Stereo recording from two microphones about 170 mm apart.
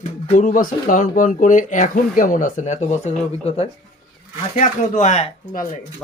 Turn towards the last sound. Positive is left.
turn(degrees=45)  # may be behind; listen again after turning